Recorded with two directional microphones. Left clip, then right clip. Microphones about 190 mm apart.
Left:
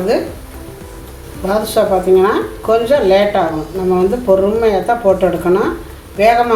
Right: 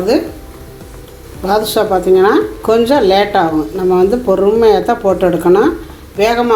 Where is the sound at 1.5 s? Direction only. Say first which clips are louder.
Right 1 dB; 50° right (ahead or behind).